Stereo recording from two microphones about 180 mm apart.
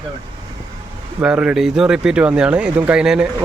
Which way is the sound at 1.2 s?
5° right (ahead or behind).